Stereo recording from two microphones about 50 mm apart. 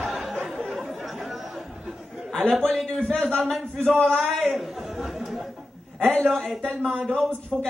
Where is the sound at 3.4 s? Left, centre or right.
Centre.